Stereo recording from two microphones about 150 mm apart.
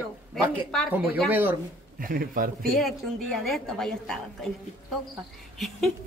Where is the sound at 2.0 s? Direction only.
70° right (ahead or behind).